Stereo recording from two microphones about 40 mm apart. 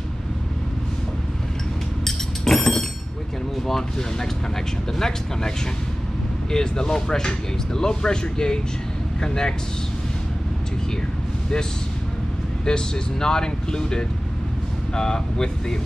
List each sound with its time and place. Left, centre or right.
2.0 s a sound: centre
3.5 s speech: centre
6.5 s speech: centre
12.6 s speech: centre